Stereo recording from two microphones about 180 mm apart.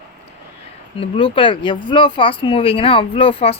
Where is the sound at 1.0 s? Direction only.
25° left (ahead or behind).